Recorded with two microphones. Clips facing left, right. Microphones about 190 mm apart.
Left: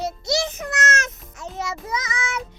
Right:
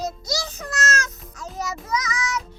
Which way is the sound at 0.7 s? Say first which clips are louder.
Right 2 dB; 25° left (ahead or behind).